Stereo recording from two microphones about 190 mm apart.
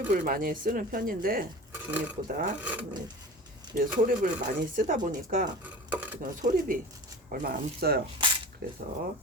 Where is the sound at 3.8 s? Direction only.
45° right (ahead or behind).